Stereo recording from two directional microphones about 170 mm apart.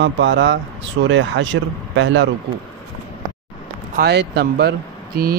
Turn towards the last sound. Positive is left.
turn(degrees=-65)  # may be behind; listen again after turning